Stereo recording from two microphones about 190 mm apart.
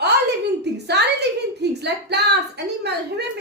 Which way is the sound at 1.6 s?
60° right (ahead or behind).